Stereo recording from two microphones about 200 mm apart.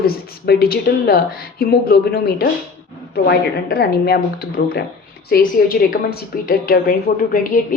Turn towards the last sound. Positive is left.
turn(degrees=45)  # may be behind; listen again after turning